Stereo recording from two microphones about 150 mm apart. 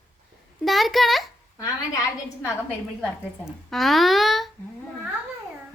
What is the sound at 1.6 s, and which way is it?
Speech, 20° left (ahead or behind).